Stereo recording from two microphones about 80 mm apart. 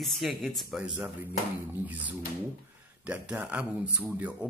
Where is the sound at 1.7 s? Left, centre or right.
Centre.